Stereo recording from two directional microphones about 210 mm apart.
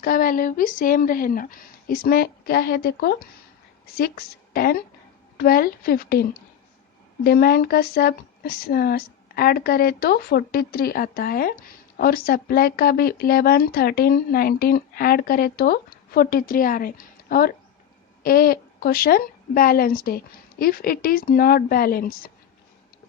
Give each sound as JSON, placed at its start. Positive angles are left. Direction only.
{"t": 0.0, "sound": "speech", "side_deg": 40}